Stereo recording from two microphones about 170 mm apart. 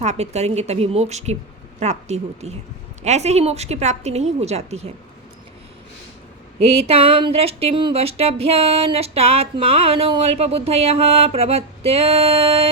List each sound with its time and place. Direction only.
0.0 s speech: 40° right (ahead or behind)
6.6 s speech: 35° right (ahead or behind)